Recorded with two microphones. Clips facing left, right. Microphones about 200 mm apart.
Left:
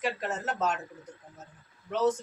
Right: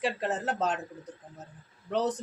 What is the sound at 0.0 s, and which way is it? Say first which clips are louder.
Speech: right 2 dB; 30° right (ahead or behind).